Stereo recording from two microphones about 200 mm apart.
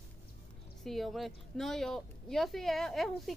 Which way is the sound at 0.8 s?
Centre (ahead or behind).